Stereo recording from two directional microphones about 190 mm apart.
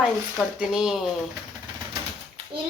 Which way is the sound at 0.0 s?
Centre (ahead or behind).